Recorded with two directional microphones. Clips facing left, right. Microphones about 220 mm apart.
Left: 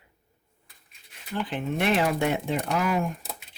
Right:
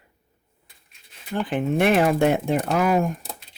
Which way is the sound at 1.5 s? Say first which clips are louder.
Right 6 dB; 55° right (ahead or behind).